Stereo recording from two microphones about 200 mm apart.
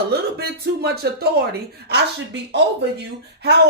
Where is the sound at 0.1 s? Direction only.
50° right (ahead or behind).